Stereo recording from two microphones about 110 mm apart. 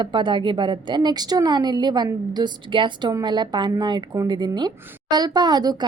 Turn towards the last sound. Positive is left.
turn(degrees=-40)  # may be behind; listen again after turning